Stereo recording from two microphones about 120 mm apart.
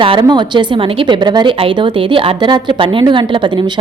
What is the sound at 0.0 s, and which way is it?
A woman's voice, 40° right (ahead or behind).